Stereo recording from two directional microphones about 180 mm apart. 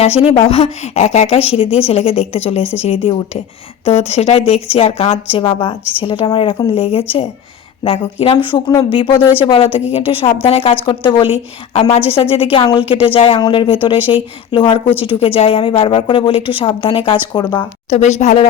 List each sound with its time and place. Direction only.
0.0 s a woman's voice: 35° left (ahead or behind)
17.8 s a woman's voice: 40° left (ahead or behind)